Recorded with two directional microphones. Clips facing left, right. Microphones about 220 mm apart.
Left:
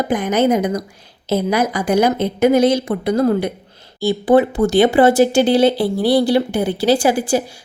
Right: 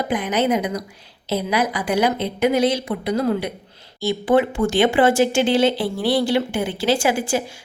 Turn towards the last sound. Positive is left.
turn(degrees=35)  # may be behind; listen again after turning